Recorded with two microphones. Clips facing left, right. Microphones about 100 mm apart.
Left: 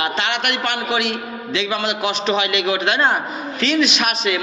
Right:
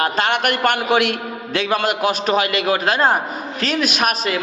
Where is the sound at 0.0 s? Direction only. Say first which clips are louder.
Right 3 dB; 45° right (ahead or behind).